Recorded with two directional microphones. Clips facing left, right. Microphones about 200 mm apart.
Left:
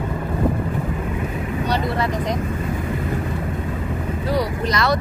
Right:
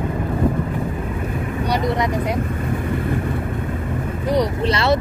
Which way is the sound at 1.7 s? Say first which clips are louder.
Right 2 dB; 15° right (ahead or behind).